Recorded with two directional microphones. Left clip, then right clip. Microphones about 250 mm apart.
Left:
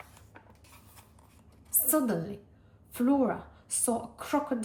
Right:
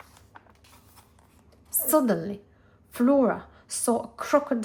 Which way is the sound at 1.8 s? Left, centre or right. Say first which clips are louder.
Right 6 dB; right.